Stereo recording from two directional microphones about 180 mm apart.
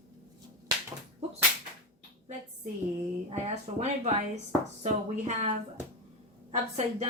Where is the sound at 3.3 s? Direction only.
35° right (ahead or behind).